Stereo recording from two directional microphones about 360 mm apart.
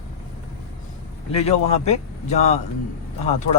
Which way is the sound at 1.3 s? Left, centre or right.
Centre.